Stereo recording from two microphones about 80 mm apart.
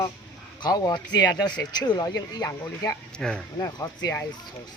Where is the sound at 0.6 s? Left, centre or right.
Left.